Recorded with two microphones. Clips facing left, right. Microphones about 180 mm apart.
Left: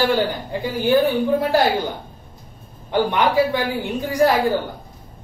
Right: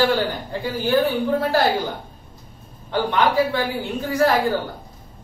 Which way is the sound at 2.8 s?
15° left (ahead or behind).